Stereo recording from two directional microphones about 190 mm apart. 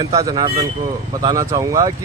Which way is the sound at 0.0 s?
20° right (ahead or behind).